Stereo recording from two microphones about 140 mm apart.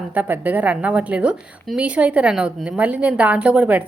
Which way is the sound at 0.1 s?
10° right (ahead or behind).